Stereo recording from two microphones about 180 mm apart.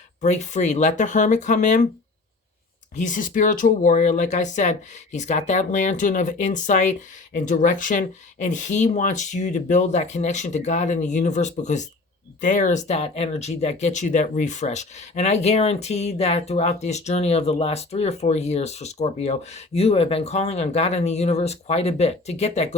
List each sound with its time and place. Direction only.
0.2 s speech: 40° left (ahead or behind)
2.9 s speech: 45° left (ahead or behind)